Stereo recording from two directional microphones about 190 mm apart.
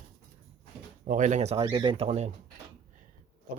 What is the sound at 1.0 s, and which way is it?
Speech, 40° right (ahead or behind).